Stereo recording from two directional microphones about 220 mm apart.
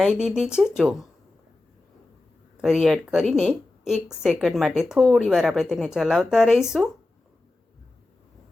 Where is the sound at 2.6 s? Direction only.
Centre (ahead or behind).